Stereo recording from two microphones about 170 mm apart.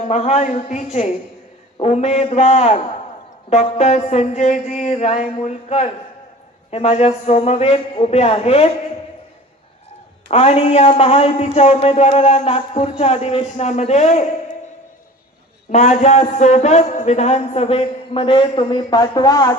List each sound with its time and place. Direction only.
0.1 s a man's voice: 40° left (ahead or behind)
10.2 s a man's voice: 40° left (ahead or behind)
15.7 s a man's voice: 45° left (ahead or behind); by 19.5 s 25° left (ahead or behind)